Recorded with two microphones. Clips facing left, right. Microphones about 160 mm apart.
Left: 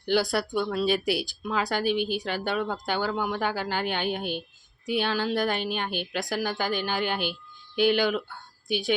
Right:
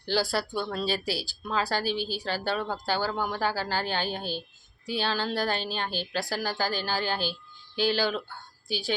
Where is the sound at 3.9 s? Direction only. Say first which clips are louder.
Left 2 dB; 35° right (ahead or behind).